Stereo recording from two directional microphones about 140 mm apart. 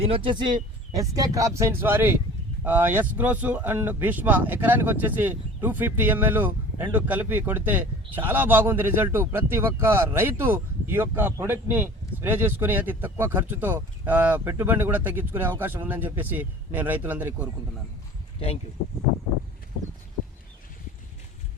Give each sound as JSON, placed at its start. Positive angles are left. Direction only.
{"t": 0.0, "sound": "speech", "side_deg": -40}
{"t": 0.9, "sound": "speech", "side_deg": -25}
{"t": 18.3, "sound": "speech", "side_deg": 45}